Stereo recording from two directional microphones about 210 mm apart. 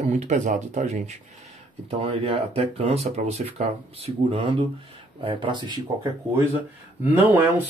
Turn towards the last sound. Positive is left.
turn(degrees=-10)  # may be behind; listen again after turning